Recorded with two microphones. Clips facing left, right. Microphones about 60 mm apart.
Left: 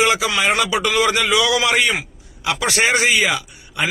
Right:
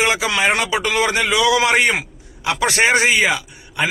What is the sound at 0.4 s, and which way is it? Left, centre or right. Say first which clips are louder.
A man's voice: right 1 dB; right.